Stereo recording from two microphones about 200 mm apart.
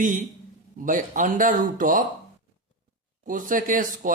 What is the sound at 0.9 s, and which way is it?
A man's voice, 40° right (ahead or behind).